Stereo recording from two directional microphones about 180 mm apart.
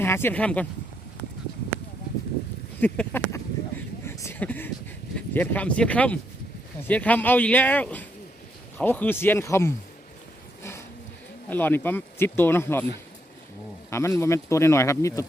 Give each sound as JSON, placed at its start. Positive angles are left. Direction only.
{"t": 0.0, "sound": "speech", "side_deg": 10}
{"t": 2.8, "sound": "speech", "side_deg": 10}
{"t": 4.0, "sound": "a sound", "side_deg": 15}
{"t": 5.1, "sound": "speech", "side_deg": 10}
{"t": 10.6, "sound": "a sound", "side_deg": 15}
{"t": 11.4, "sound": "speech", "side_deg": 10}
{"t": 13.9, "sound": "speech", "side_deg": 15}